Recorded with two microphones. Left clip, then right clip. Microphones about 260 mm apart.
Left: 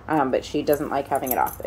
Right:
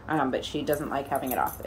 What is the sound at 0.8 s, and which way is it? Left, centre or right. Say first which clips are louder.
Speech: left 5 dB; left.